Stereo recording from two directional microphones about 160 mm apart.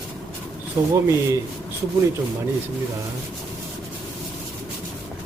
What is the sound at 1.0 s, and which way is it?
Speech, 20° right (ahead or behind).